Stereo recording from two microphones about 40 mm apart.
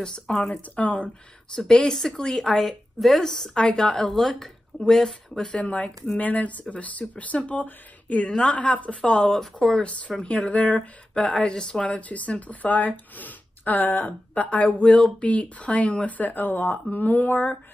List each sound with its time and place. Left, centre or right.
0.0 s speech: centre
0.6 s speech: left
1.5 s a woman's voice: centre
5.6 s speech: left
8.3 s speech: left
8.5 s speech: left
11.3 s speech: centre
16.2 s speech: left